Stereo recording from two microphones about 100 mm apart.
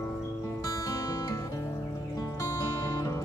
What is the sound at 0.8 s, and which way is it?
Music, 35° left (ahead or behind).